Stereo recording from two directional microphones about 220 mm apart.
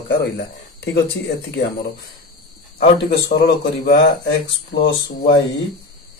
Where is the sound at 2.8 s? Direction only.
45° left (ahead or behind).